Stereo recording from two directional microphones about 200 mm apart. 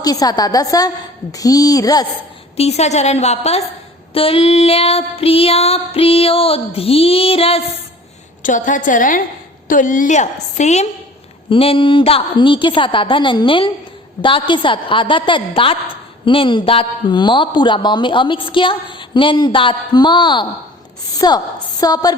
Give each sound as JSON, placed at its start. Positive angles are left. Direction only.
{"t": 0.0, "sound": "speech", "side_deg": 20}
{"t": 2.6, "sound": "a woman's voice", "side_deg": 35}
{"t": 8.4, "sound": "a woman's voice", "side_deg": 40}